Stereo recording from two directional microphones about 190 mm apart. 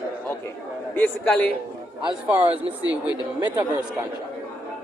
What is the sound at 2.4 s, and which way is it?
Speech, 30° right (ahead or behind).